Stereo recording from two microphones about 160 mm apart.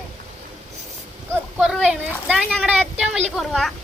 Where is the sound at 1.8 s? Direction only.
5° right (ahead or behind).